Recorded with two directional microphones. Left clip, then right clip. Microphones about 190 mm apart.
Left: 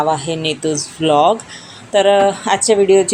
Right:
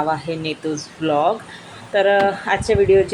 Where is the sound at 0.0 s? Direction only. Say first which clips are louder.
Left 5 dB; 30° left (ahead or behind).